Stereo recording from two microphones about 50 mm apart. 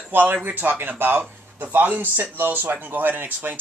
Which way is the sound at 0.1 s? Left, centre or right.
Right.